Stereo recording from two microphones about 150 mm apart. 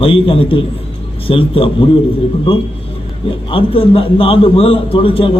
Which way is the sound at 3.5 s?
35° left (ahead or behind).